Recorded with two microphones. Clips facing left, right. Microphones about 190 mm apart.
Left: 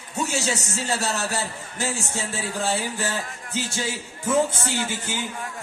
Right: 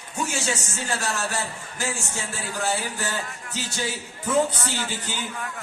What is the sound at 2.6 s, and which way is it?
Speech, 25° left (ahead or behind).